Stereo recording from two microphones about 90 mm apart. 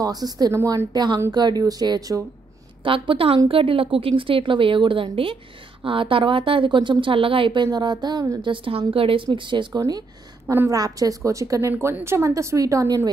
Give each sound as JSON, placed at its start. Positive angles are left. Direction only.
{"t": 0.0, "sound": "speech", "side_deg": -45}
{"t": 2.8, "sound": "a woman's voice", "side_deg": -70}
{"t": 5.9, "sound": "a woman's voice", "side_deg": -75}
{"t": 8.4, "sound": "a woman's voice", "side_deg": -70}
{"t": 9.8, "sound": "speech", "side_deg": -45}
{"t": 10.4, "sound": "a woman's voice", "side_deg": -25}
{"t": 10.7, "sound": "a woman's voice", "side_deg": -40}